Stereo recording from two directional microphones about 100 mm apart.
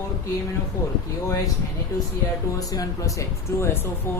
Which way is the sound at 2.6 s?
35° left (ahead or behind).